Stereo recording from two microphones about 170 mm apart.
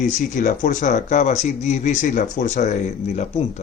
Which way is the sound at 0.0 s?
45° left (ahead or behind).